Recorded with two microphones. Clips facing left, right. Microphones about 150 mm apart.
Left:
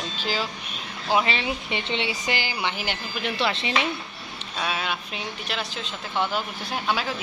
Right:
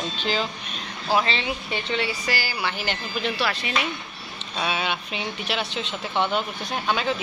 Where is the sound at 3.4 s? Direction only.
25° left (ahead or behind).